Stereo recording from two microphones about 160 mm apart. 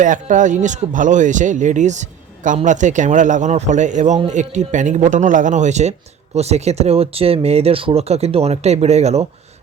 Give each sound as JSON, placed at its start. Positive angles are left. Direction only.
{"t": 0.0, "sound": "speech", "side_deg": -50}